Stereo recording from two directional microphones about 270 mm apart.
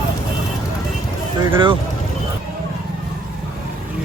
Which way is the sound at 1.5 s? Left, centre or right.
Centre.